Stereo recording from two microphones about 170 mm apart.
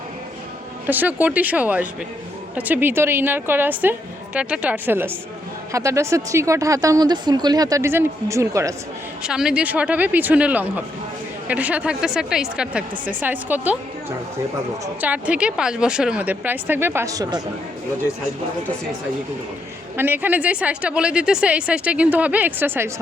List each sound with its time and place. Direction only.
0.9 s a woman's voice: 10° right (ahead or behind)
9.2 s a woman's voice: 5° right (ahead or behind)
15.0 s a woman's voice: 10° right (ahead or behind)
20.0 s a woman's voice: 10° right (ahead or behind)